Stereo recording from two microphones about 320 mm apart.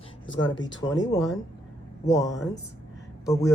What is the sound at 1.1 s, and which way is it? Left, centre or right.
A woman's voice, centre.